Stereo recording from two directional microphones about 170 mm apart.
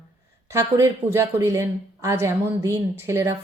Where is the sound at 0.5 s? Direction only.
15° right (ahead or behind).